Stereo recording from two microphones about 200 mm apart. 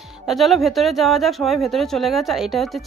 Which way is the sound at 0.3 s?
Centre (ahead or behind).